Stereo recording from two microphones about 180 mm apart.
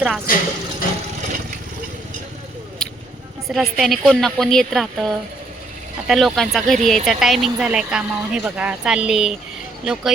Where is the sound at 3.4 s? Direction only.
Centre (ahead or behind).